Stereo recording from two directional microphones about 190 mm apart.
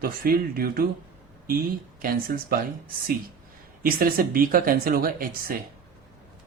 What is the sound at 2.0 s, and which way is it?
Speech, 50° right (ahead or behind).